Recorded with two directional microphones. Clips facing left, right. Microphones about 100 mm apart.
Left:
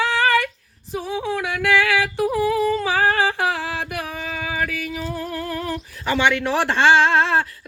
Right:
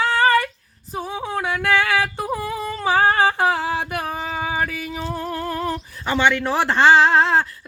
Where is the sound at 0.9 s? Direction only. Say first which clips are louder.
Left 1 dB; 40° right (ahead or behind).